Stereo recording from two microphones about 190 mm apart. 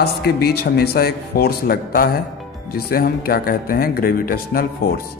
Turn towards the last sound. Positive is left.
turn(degrees=50)  # may be behind; listen again after turning